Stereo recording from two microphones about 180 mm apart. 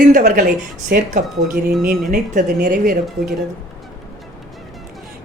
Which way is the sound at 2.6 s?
55° right (ahead or behind).